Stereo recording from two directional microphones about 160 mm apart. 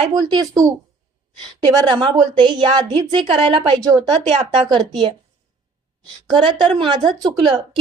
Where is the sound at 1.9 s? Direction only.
30° right (ahead or behind).